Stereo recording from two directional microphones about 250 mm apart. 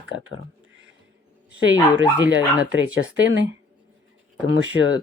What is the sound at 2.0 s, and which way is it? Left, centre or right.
Speech, right.